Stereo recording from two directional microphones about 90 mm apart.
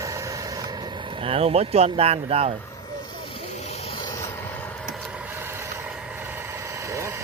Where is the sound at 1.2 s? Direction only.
90° right.